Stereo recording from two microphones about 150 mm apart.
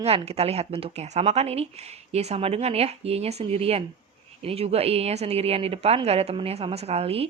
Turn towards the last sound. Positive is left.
turn(degrees=-40)  # may be behind; listen again after turning